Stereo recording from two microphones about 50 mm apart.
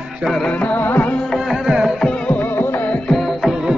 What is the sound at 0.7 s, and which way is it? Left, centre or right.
Music, left.